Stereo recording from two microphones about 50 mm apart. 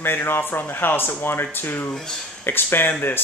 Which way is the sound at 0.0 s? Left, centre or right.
Left.